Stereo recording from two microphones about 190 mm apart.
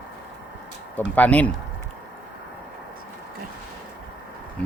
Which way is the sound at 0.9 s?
10° left (ahead or behind).